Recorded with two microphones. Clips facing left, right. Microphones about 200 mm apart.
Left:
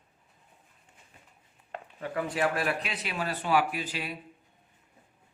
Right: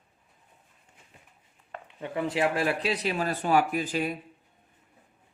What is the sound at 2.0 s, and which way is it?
Speech, 25° right (ahead or behind).